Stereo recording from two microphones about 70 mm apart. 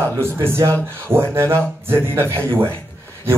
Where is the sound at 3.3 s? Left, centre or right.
Right.